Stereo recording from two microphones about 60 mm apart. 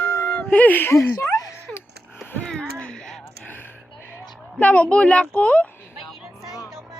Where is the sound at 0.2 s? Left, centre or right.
Left.